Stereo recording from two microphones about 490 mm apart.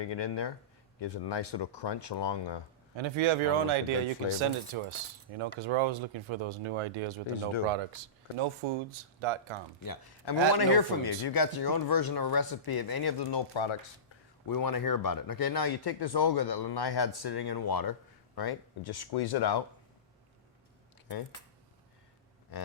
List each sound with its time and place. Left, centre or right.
0.0 s speech: left
2.9 s speech: right
5.4 s speech: right
9.8 s speech: left
14.4 s speech: left